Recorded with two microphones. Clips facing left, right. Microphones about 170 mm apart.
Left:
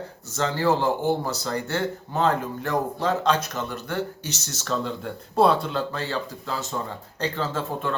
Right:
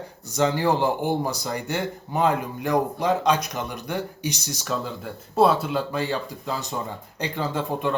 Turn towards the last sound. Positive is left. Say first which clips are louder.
# right 2 dB
turn(degrees=-15)  # may be behind; listen again after turning